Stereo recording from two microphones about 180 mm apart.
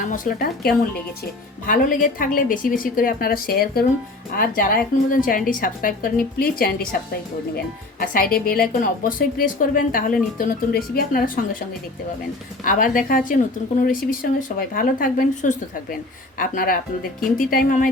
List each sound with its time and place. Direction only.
0.0 s a woman's voice: 50° left (ahead or behind)
7.9 s a woman's voice: 50° left (ahead or behind)
12.6 s a woman's voice: 50° left (ahead or behind)